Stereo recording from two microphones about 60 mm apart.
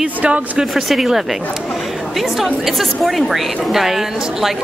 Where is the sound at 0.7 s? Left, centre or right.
Centre.